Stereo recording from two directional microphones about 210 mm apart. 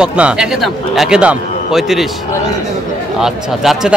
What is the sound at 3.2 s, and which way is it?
Speech, 5° right (ahead or behind).